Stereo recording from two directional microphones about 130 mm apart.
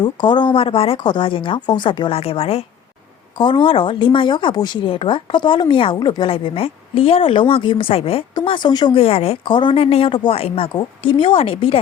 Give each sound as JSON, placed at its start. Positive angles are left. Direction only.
{"t": 0.0, "sound": "a woman's voice", "side_deg": 35}
{"t": 3.3, "sound": "a woman's voice", "side_deg": 35}
{"t": 8.4, "sound": "a woman's voice", "side_deg": 35}
{"t": 9.0, "sound": "a woman's voice", "side_deg": 50}
{"t": 9.4, "sound": "a woman's voice", "side_deg": 40}
{"t": 10.7, "sound": "a woman's voice", "side_deg": 35}